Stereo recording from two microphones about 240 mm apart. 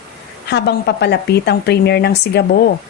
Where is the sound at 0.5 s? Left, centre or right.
Left.